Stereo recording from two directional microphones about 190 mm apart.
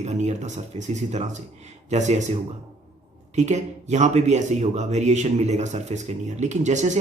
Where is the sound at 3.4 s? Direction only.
40° right (ahead or behind).